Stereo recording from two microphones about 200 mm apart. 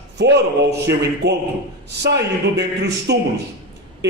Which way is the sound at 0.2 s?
55° right (ahead or behind).